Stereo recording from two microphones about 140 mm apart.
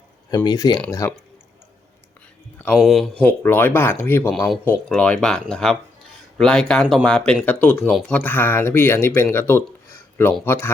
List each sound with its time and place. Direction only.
0.4 s speech: 30° left (ahead or behind)
2.7 s speech: centre (ahead or behind)
3.2 s speech: 10° left (ahead or behind)
4.4 s speech: centre (ahead or behind)